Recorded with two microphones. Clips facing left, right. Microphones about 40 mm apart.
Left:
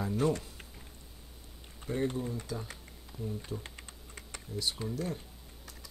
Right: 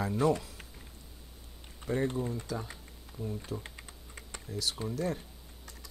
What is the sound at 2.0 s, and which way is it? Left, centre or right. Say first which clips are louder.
Speech: right 1 dB; centre.